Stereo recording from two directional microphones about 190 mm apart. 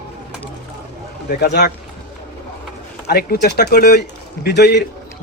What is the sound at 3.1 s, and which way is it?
Speech, 55° left (ahead or behind).